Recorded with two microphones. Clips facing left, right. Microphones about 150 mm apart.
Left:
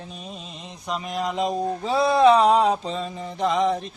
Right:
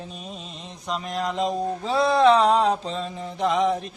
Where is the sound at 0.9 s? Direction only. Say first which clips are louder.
Even; 5° left (ahead or behind).